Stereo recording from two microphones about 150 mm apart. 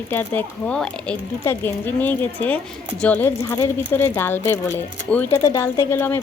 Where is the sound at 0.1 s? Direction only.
10° left (ahead or behind).